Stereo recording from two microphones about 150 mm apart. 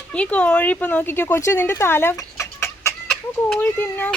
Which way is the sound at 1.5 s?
15° left (ahead or behind).